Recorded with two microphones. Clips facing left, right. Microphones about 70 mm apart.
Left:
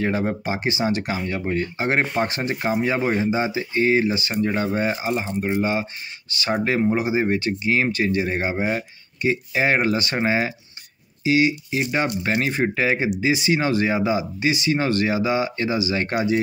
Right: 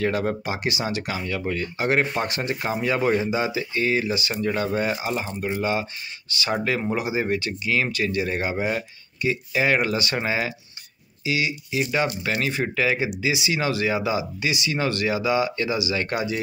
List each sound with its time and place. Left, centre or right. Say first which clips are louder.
0.0 s speech: left 1 dB; left